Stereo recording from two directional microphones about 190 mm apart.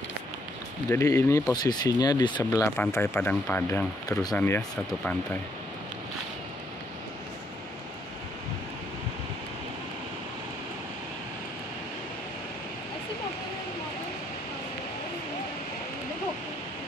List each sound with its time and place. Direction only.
0.8 s speech: 15° left (ahead or behind)